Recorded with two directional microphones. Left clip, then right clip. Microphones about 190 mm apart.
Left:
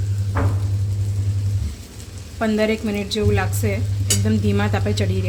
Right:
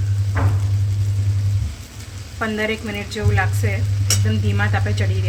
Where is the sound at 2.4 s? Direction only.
45° left (ahead or behind).